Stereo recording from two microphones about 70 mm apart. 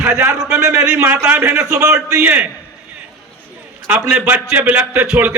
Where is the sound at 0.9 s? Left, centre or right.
Right.